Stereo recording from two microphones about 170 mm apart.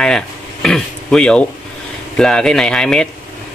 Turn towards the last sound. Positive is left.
turn(degrees=5)  # may be behind; listen again after turning